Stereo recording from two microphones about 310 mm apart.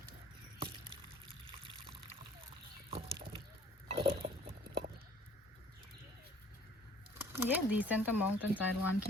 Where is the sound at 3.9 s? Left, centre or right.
Centre.